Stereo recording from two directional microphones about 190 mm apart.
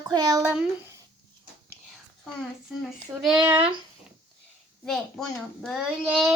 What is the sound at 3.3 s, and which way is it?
Speech, 5° right (ahead or behind).